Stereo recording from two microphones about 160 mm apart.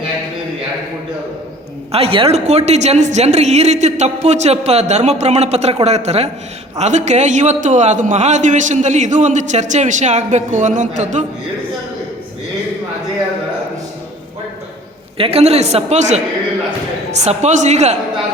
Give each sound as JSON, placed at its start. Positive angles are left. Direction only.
{"t": 1.9, "sound": "a man's voice", "side_deg": -40}
{"t": 15.2, "sound": "a man's voice", "side_deg": -40}